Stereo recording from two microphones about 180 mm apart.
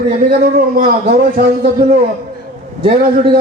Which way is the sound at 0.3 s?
55° right (ahead or behind).